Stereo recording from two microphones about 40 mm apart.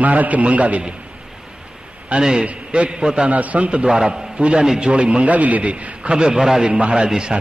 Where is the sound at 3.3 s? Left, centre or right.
Right.